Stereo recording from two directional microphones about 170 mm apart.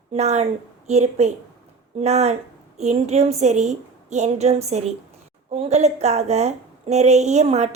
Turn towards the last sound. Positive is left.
turn(degrees=-40)  # may be behind; listen again after turning